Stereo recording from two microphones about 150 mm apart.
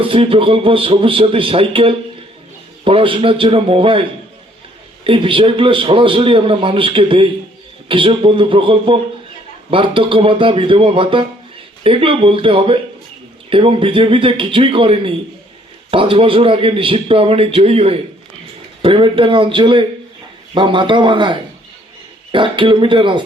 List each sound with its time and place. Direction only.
0.0 s a man's voice: 35° right (ahead or behind)
5.0 s a man's voice: 35° right (ahead or behind)